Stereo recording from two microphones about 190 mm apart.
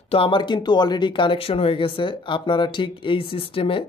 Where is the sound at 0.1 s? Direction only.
25° left (ahead or behind).